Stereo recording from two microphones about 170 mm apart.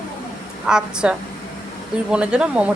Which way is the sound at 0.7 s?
5° right (ahead or behind).